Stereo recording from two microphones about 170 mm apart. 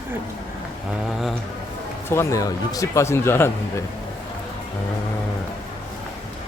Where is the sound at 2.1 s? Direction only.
15° left (ahead or behind).